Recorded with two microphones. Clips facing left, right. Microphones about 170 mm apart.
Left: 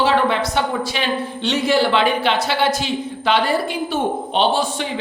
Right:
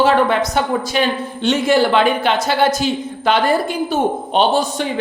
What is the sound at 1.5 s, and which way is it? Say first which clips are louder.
Speech: right 3 dB; 50° right (ahead or behind).